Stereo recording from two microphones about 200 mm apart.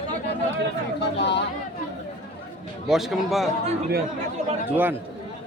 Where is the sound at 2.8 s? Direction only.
Centre (ahead or behind).